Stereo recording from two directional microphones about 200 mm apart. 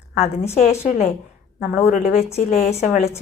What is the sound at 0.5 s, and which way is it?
A woman's voice, 35° left (ahead or behind).